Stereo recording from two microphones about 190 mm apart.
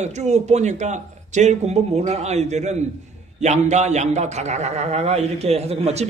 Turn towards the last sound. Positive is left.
turn(degrees=-35)  # may be behind; listen again after turning